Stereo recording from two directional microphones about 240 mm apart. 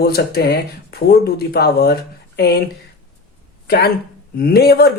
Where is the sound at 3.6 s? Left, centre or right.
Left.